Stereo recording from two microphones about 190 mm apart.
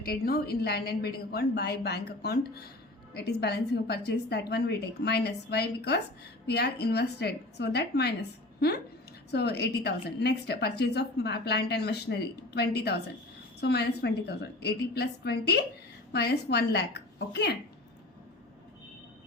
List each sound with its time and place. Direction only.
0.0 s a woman's voice: 55° left (ahead or behind)
9.3 s a woman's voice: 60° left (ahead or behind)